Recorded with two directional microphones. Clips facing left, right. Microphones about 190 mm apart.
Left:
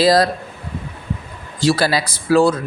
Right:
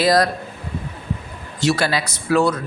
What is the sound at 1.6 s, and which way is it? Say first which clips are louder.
Speech: left 3 dB; 35° left (ahead or behind).